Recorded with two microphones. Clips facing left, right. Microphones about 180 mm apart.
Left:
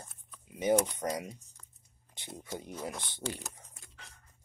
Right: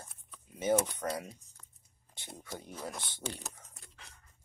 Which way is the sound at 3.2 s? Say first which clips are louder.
Left 4 dB; centre (ahead or behind).